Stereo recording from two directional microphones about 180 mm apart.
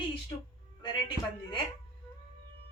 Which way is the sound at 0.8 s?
25° left (ahead or behind).